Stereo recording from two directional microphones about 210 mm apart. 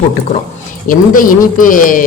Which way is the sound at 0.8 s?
40° left (ahead or behind).